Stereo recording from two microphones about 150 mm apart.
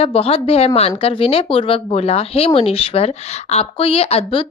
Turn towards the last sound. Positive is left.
turn(degrees=40)  # may be behind; listen again after turning